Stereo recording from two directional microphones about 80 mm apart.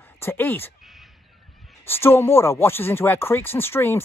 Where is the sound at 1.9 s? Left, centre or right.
Left.